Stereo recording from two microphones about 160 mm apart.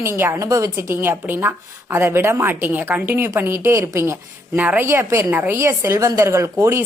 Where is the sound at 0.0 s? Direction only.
15° right (ahead or behind).